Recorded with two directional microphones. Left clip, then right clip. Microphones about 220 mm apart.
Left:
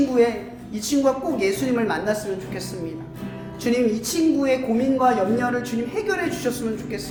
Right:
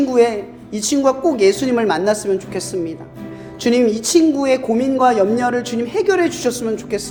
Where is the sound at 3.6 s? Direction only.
30° right (ahead or behind).